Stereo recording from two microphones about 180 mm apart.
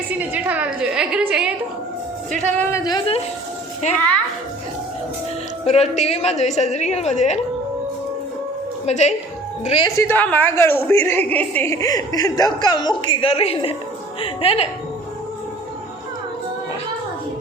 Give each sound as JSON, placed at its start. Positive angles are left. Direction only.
{"t": 0.1, "sound": "a woman's voice", "side_deg": -10}
{"t": 2.3, "sound": "a woman's voice", "side_deg": 10}
{"t": 2.8, "sound": "speech", "side_deg": 25}
{"t": 5.6, "sound": "a woman's voice", "side_deg": 35}
{"t": 8.9, "sound": "a woman's voice", "side_deg": 40}
{"t": 10.0, "sound": "a woman's voice", "side_deg": 10}